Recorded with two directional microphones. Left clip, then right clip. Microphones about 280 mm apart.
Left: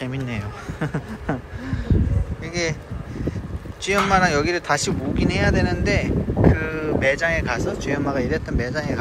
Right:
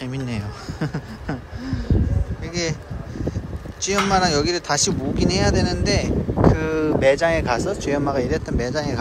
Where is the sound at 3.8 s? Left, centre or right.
Centre.